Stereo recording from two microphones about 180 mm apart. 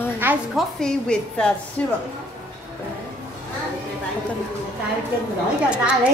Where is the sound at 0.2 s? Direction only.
10° right (ahead or behind).